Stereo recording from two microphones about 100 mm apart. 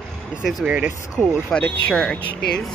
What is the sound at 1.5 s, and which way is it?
Speech, 10° left (ahead or behind).